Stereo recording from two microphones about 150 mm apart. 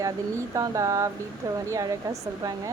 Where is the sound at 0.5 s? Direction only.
20° right (ahead or behind).